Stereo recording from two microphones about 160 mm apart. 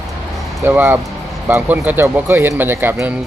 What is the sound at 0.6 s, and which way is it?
A man's voice, 15° right (ahead or behind).